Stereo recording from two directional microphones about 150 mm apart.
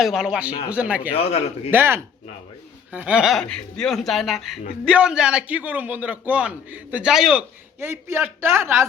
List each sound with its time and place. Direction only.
0.0 s a man's voice: centre (ahead or behind)
1.1 s a man's voice: 45° left (ahead or behind)
1.7 s a man's voice: 15° right (ahead or behind)